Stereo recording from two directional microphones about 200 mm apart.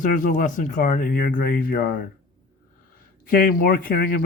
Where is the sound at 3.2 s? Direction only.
45° left (ahead or behind).